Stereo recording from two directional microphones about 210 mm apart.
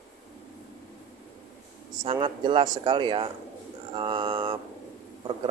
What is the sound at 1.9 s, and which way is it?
Speech, 25° right (ahead or behind).